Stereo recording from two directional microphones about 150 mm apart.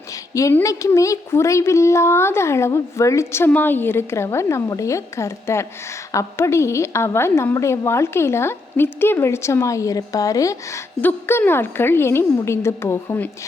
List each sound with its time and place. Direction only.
0.6 s a woman's voice: 20° left (ahead or behind)